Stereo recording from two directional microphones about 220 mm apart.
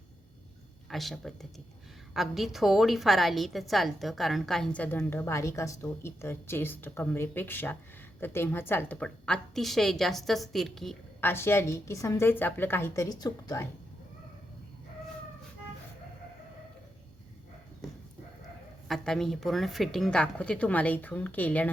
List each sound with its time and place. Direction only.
0.9 s a woman's voice: centre (ahead or behind); by 13.7 s 15° left (ahead or behind)
18.9 s a woman's voice: centre (ahead or behind)